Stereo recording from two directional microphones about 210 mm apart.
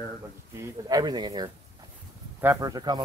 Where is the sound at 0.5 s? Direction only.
15° right (ahead or behind).